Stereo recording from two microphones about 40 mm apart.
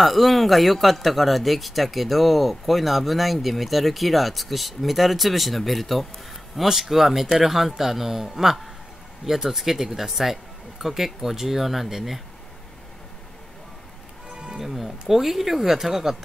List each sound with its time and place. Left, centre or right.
0.0 s speech: centre
14.3 s music: right
14.6 s speech: centre